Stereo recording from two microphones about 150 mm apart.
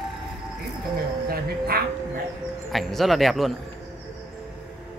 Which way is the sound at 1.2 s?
90° right.